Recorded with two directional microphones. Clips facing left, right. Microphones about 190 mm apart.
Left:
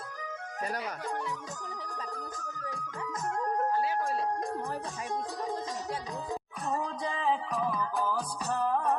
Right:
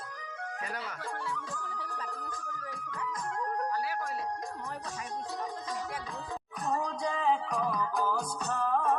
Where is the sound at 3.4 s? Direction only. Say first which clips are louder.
Left 4 dB; 25° left (ahead or behind).